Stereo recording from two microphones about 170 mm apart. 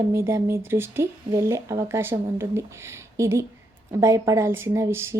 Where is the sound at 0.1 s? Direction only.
15° right (ahead or behind).